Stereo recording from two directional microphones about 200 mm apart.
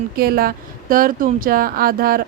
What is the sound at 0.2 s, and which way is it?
Speech, 50° right (ahead or behind).